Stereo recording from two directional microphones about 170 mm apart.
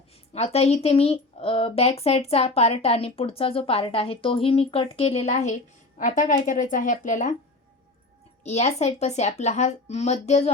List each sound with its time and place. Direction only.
0.3 s speech: 40° left (ahead or behind)
8.4 s speech: 40° left (ahead or behind)